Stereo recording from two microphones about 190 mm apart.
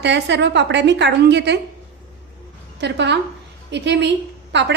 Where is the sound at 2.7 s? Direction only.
65° right (ahead or behind).